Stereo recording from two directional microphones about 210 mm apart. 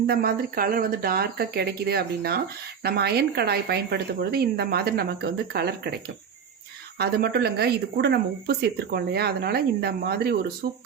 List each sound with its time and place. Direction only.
0.1 s speech: 45° right (ahead or behind)
7.0 s speech: 50° right (ahead or behind)